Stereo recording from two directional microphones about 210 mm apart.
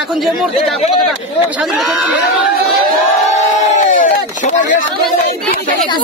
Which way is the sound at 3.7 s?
40° left (ahead or behind).